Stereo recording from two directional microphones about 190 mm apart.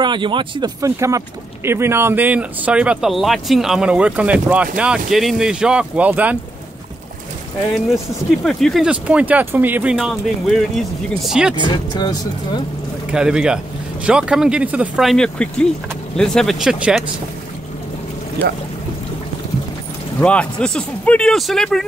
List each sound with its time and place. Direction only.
0.0 s speech: 25° right (ahead or behind); by 6.3 s 10° right (ahead or behind)
8.5 s speech: centre (ahead or behind)
11.6 s speech: 20° left (ahead or behind)
13.1 s speech: 5° right (ahead or behind)
18.4 s speech: 10° left (ahead or behind)
20.2 s speech: 5° left (ahead or behind)